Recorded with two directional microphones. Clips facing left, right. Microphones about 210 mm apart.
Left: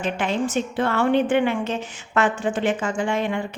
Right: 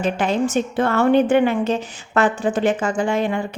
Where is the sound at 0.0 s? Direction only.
40° right (ahead or behind).